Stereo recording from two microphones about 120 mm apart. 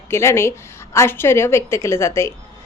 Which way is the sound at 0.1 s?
20° left (ahead or behind).